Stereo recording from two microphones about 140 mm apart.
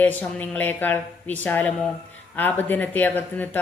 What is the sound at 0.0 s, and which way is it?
A woman's voice, 10° left (ahead or behind).